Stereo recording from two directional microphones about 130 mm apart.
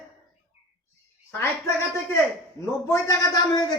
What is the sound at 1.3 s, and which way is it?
A woman's voice, 20° left (ahead or behind).